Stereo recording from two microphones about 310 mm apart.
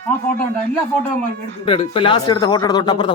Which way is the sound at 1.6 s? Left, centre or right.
Centre.